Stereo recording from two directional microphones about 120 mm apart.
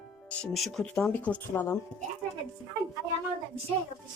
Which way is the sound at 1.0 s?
15° left (ahead or behind).